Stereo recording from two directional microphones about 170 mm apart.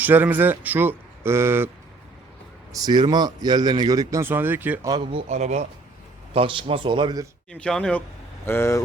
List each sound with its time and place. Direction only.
0.0 s speech: 10° right (ahead or behind)
2.7 s speech: 25° right (ahead or behind)
4.9 s speech: 25° right (ahead or behind)
5.3 s speech: 45° right (ahead or behind)
6.3 s speech: 30° right (ahead or behind)
7.5 s speech: 5° left (ahead or behind)
8.4 s speech: 15° left (ahead or behind)